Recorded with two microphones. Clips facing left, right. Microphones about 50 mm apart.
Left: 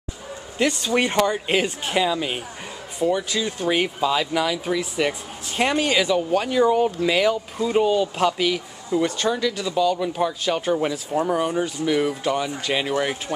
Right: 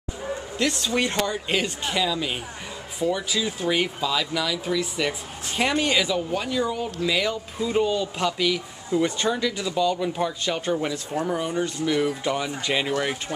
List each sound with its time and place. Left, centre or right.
0.8 s speech: left
3.0 s speech: centre
4.0 s speech: centre
6.5 s speech: left
7.6 s speech: centre
12.2 s speech: centre